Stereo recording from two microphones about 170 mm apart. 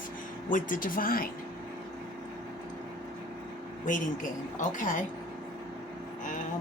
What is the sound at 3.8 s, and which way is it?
Speech, 50° left (ahead or behind).